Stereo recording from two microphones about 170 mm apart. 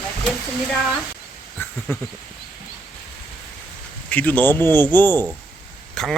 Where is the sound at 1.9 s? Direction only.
15° left (ahead or behind).